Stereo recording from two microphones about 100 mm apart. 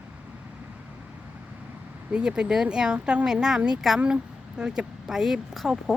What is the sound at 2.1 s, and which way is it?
Speech, 10° right (ahead or behind).